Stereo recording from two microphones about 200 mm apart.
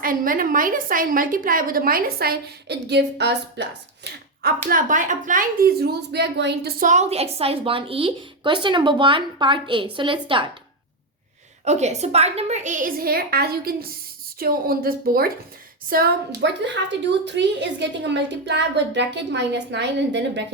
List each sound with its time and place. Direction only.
0.0 s a woman's voice: 45° right (ahead or behind)
4.4 s speech: 40° right (ahead or behind); by 10.5 s 25° right (ahead or behind)
11.6 s a woman's voice: 35° right (ahead or behind)
16.6 s a woman's voice: 60° right (ahead or behind)